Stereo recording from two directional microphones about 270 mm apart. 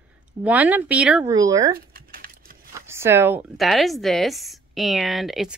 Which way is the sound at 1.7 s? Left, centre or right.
Right.